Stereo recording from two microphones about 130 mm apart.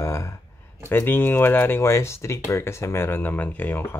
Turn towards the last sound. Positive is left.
turn(degrees=15)  # may be behind; listen again after turning